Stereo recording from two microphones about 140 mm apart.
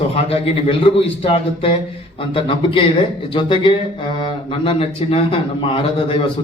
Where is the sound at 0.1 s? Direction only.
45° left (ahead or behind).